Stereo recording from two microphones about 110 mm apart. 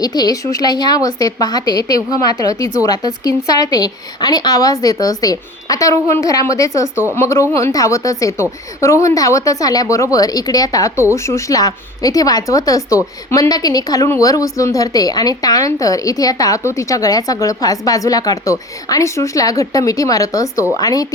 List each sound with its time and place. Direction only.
0.0 s a woman's voice: 35° left (ahead or behind)